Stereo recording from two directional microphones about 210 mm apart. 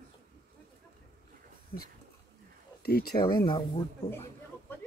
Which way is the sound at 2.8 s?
50° left (ahead or behind).